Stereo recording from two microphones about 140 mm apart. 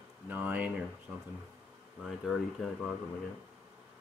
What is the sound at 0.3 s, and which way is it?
Speech, 10° right (ahead or behind).